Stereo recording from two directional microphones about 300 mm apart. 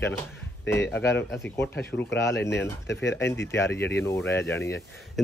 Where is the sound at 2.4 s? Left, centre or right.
Left.